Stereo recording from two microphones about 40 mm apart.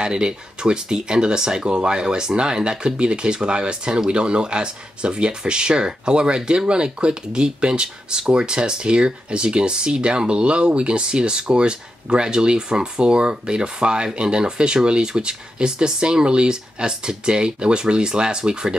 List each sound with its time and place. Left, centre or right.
0.0 s speech: right